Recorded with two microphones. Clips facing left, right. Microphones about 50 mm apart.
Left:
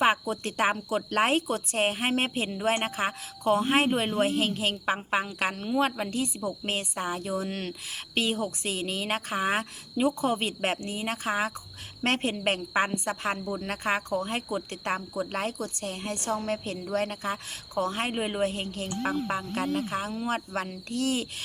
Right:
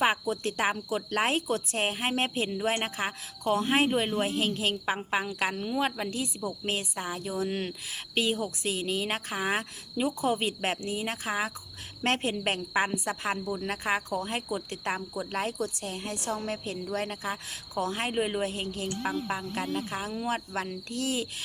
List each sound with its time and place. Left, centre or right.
0.0 s speech: centre